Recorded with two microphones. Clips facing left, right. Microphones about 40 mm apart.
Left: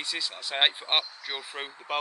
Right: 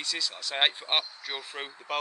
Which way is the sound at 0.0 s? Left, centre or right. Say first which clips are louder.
Even; centre.